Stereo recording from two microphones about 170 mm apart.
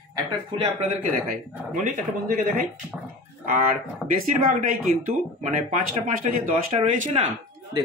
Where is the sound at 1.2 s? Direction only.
50° right (ahead or behind).